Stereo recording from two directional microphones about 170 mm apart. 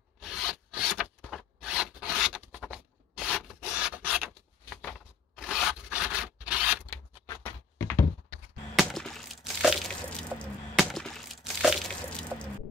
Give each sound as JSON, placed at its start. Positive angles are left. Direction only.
{"t": 0.2, "sound": "zipper", "side_deg": 0}
{"t": 4.8, "sound": "rub", "side_deg": 0}
{"t": 7.7, "sound": "thunk", "side_deg": 20}
{"t": 8.7, "sound": "a sound", "side_deg": 0}